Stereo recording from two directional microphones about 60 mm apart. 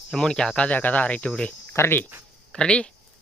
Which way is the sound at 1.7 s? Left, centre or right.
Left.